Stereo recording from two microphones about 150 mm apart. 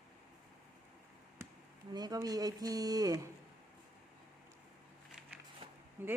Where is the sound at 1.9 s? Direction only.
25° right (ahead or behind).